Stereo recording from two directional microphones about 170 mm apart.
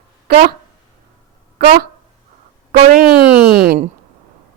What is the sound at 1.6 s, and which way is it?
Speech, 65° right (ahead or behind).